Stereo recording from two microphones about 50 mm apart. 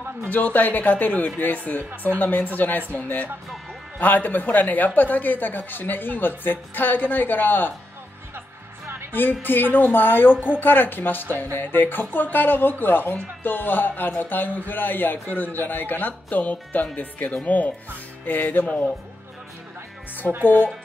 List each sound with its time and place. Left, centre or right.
0.3 s speech: left
9.4 s speech: left
20.4 s speech: left